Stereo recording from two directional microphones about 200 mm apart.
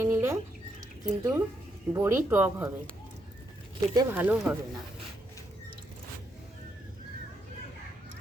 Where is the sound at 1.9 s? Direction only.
15° right (ahead or behind).